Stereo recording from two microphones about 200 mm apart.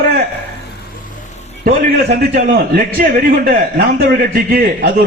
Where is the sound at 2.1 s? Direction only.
45° right (ahead or behind).